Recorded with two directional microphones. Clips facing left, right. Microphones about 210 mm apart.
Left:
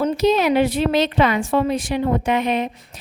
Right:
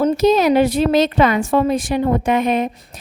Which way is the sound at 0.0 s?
45° right (ahead or behind).